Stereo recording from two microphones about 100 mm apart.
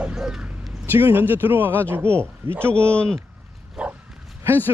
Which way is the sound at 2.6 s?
10° left (ahead or behind).